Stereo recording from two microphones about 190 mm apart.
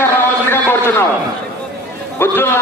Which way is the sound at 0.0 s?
10° left (ahead or behind).